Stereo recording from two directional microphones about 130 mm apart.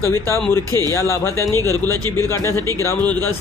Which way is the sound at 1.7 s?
25° right (ahead or behind).